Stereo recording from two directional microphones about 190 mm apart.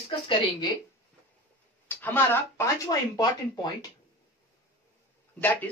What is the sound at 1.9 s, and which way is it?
Speech, 10° left (ahead or behind).